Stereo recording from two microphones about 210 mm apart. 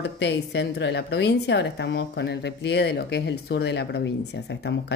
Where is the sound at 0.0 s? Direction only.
55° left (ahead or behind).